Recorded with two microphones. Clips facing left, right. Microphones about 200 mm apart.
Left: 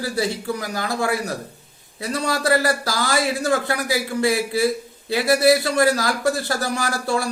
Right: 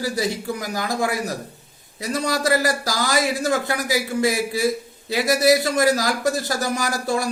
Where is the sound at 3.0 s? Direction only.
20° right (ahead or behind).